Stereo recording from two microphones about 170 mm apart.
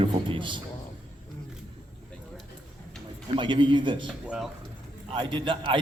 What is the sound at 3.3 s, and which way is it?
Speech, 30° right (ahead or behind).